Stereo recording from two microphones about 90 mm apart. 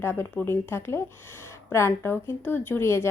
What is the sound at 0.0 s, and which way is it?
A woman's voice, 25° left (ahead or behind).